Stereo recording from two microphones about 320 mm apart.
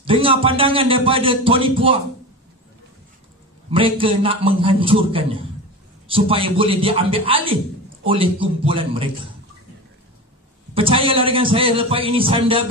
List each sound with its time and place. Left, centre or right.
0.0 s speech: centre
3.7 s speech: centre
10.7 s speech: centre